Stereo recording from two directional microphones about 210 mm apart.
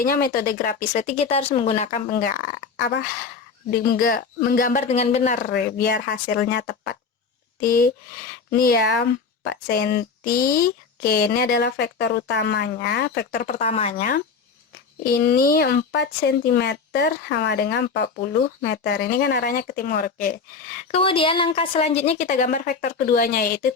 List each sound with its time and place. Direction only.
0.0 s speech: 45° left (ahead or behind)
13.6 s speech: 30° left (ahead or behind)
15.0 s speech: 45° left (ahead or behind)
20.9 s speech: 25° left (ahead or behind); by 23.7 s 45° left (ahead or behind)